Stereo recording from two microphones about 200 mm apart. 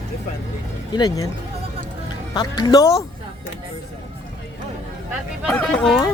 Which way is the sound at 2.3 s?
20° left (ahead or behind).